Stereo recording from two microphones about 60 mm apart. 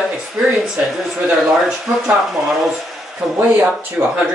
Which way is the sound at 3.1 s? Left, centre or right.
Centre.